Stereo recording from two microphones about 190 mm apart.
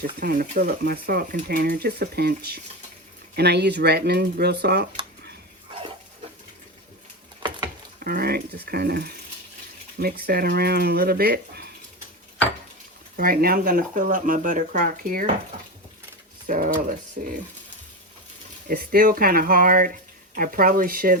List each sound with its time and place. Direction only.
0.0 s speech: 55° right (ahead or behind)
7.9 s speech: 50° right (ahead or behind)
10.2 s speech: 55° right (ahead or behind)
13.1 s speech: 50° right (ahead or behind)
16.5 s speech: 45° right (ahead or behind)
18.7 s speech: 50° right (ahead or behind)